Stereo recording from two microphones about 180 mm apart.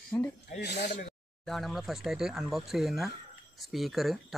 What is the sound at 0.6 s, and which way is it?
Speech, 70° left (ahead or behind).